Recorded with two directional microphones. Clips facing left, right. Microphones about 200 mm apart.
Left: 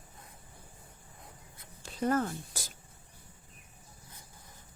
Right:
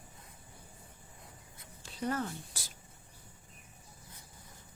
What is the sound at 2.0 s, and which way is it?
Speech, 50° left (ahead or behind).